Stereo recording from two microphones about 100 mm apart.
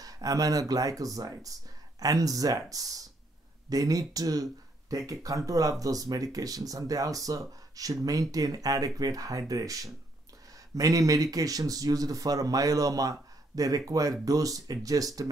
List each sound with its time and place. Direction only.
0.0 s speech: 35° right (ahead or behind)